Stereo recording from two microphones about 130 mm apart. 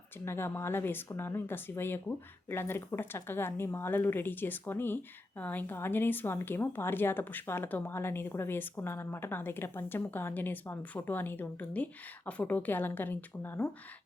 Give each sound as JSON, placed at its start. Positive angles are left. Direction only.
{"t": 0.3, "sound": "a woman's voice", "side_deg": 20}